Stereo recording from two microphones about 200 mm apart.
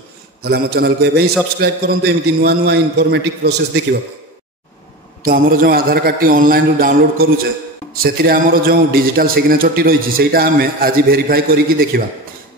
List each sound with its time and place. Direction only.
0.4 s a man's voice: 50° right (ahead or behind)
5.2 s a man's voice: 45° right (ahead or behind)